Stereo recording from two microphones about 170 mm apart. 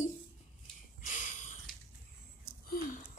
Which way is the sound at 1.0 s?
50° left (ahead or behind).